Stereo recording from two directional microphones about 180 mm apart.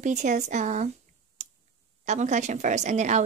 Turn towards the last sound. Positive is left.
turn(degrees=-40)  # may be behind; listen again after turning